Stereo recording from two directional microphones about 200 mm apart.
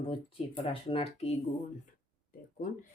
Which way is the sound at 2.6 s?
40° left (ahead or behind).